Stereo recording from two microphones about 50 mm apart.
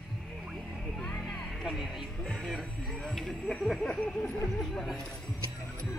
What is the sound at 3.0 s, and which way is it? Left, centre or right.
Speech, centre.